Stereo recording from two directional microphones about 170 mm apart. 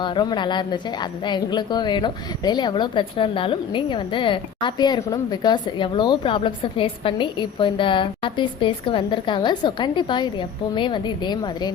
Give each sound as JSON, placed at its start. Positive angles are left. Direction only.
{"t": 0.0, "sound": "a woman's voice", "side_deg": 25}